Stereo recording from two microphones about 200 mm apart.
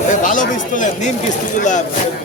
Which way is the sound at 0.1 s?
40° left (ahead or behind).